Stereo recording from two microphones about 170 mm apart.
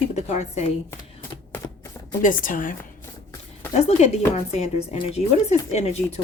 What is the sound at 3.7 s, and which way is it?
Speech, 40° left (ahead or behind).